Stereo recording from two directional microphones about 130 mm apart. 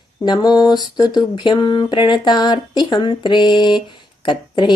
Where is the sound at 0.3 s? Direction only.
35° left (ahead or behind).